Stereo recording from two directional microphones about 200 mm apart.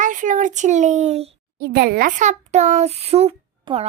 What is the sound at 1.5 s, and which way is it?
A child's voice, 50° right (ahead or behind).